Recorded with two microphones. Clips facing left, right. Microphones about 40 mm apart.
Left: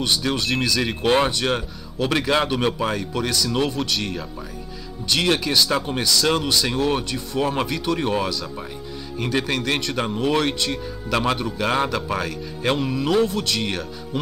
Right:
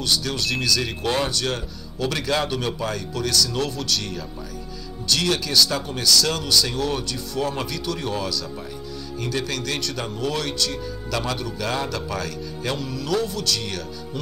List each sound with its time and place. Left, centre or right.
0.0 s speech: left